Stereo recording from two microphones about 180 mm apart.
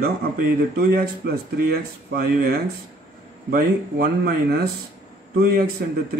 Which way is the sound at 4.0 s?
60° right (ahead or behind).